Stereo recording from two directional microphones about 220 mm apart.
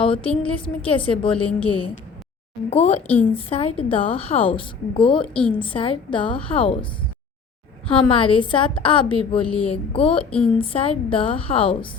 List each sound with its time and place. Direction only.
0.0 s a woman's voice: 25° left (ahead or behind)
3.1 s a woman's voice: 10° left (ahead or behind)
3.5 s a woman's voice: 25° left (ahead or behind)
5.2 s a woman's voice: 5° left (ahead or behind)
5.5 s a woman's voice: 25° left (ahead or behind)
7.9 s a woman's voice: 25° left (ahead or behind)
10.2 s a woman's voice: 5° left (ahead or behind)
10.6 s a woman's voice: 25° left (ahead or behind)